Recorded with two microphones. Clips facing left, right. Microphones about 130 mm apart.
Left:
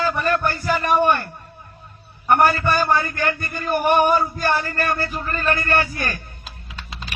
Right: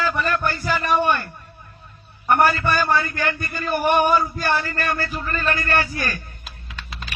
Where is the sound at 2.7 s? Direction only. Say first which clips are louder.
Left 1 dB; 45° left (ahead or behind).